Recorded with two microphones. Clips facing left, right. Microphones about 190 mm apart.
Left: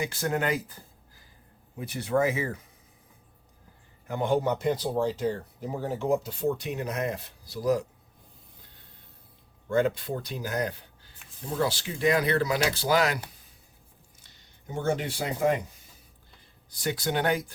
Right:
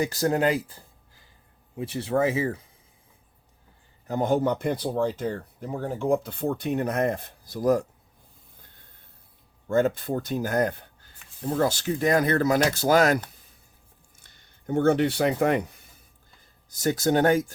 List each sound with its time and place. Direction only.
0.0 s speech: 40° right (ahead or behind)
4.0 s speech: 40° right (ahead or behind)
9.7 s speech: 45° right (ahead or behind)
14.2 s a sound: 55° right (ahead or behind)
16.6 s speech: 45° right (ahead or behind)